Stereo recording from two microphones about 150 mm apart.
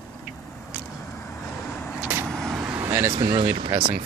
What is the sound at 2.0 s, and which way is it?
Vehicle, 15° right (ahead or behind).